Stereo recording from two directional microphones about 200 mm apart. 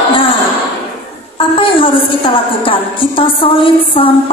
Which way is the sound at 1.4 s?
25° left (ahead or behind).